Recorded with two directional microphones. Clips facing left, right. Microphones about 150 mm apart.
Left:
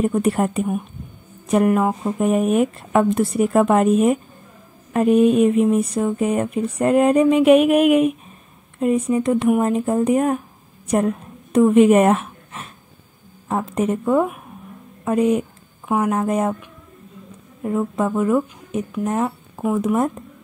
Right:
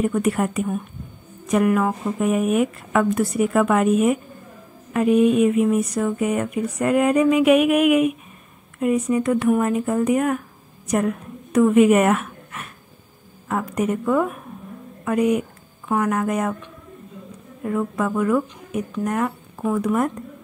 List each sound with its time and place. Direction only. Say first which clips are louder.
0.0 s a woman's voice: left 2 dB; 30° left (ahead or behind)
17.6 s a woman's voice: left 2 dB; 25° left (ahead or behind)